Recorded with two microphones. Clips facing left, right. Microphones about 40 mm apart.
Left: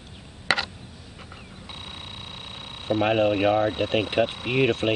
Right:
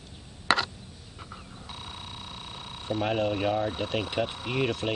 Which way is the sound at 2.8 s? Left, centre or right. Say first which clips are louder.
Left 6 dB; left.